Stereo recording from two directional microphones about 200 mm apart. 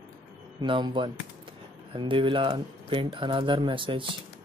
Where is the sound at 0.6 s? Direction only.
20° right (ahead or behind).